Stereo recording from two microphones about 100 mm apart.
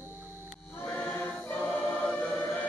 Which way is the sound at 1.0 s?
15° left (ahead or behind).